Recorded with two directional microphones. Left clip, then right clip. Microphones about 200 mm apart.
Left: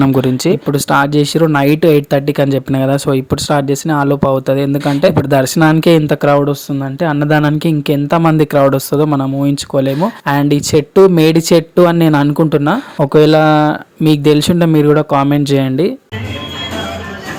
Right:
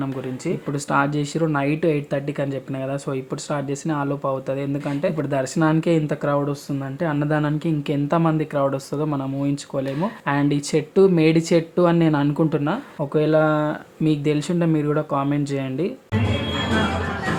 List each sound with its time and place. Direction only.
0.0 s speech: 50° left (ahead or behind)